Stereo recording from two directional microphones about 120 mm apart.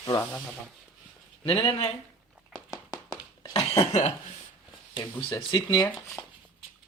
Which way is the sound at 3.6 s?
55° left (ahead or behind).